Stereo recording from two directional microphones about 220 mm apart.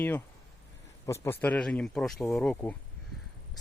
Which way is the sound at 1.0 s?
10° left (ahead or behind).